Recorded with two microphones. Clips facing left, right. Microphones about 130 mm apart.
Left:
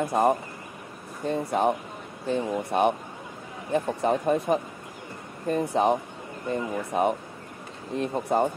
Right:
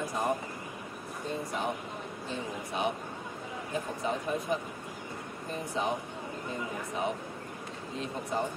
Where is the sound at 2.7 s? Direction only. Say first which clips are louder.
Left 8 dB; 55° left (ahead or behind).